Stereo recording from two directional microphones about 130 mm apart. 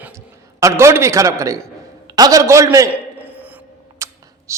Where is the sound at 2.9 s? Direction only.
15° right (ahead or behind).